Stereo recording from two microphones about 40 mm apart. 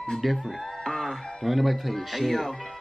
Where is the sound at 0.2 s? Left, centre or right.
Centre.